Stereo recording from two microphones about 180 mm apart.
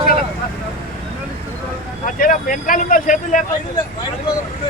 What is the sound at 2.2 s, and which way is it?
Speech, 50° left (ahead or behind).